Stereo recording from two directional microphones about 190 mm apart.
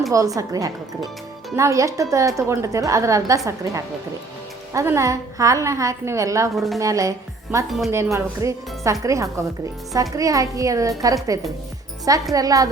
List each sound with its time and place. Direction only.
0.1 s speech: 15° right (ahead or behind)
6.5 s a woman's voice: centre (ahead or behind)
6.7 s speech: 15° right (ahead or behind)